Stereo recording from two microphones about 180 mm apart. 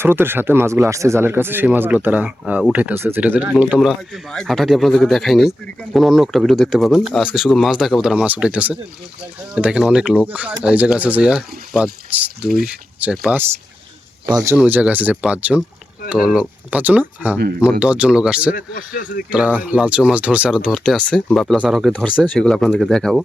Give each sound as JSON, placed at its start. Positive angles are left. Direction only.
{"t": 0.0, "sound": "speech", "side_deg": -10}
{"t": 14.3, "sound": "speech", "side_deg": -20}
{"t": 18.5, "sound": "speech", "side_deg": 50}
{"t": 19.3, "sound": "speech", "side_deg": -5}
{"t": 20.7, "sound": "speech", "side_deg": 5}